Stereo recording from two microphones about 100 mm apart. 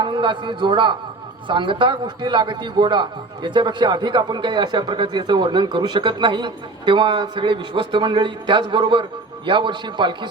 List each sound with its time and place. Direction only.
0.0 s a man's voice: 55° right (ahead or behind)